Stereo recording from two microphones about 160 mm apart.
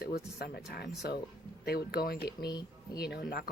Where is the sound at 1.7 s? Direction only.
75° left (ahead or behind).